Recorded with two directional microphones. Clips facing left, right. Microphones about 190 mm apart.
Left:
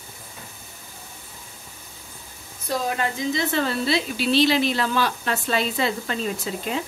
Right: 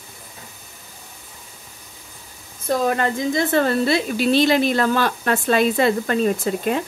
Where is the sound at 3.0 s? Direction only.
50° right (ahead or behind).